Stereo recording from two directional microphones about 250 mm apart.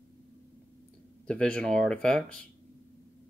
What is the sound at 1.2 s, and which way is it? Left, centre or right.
Speech, centre.